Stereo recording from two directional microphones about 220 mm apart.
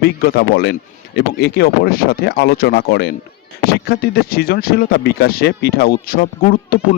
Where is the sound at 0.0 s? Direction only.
45° left (ahead or behind).